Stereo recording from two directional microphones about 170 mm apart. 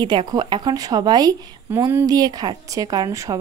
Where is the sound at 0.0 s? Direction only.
25° right (ahead or behind).